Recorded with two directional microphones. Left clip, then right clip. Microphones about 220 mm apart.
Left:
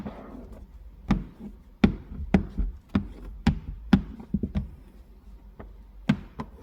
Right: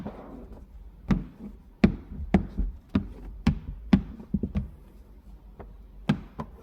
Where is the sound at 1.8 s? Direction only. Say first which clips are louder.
Even; 5° right (ahead or behind).